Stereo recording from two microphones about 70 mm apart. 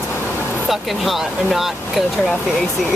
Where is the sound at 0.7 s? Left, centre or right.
Centre.